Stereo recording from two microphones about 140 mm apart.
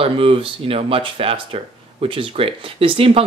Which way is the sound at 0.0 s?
40° right (ahead or behind).